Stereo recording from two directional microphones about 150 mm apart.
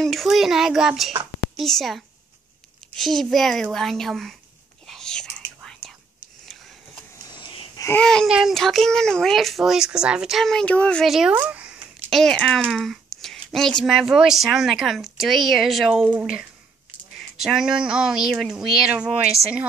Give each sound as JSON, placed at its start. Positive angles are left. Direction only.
{"t": 0.0, "sound": "a child's voice", "side_deg": 0}
{"t": 4.8, "sound": "whispering", "side_deg": 5}
{"t": 7.3, "sound": "a sound", "side_deg": 30}
{"t": 7.9, "sound": "a child's voice", "side_deg": 5}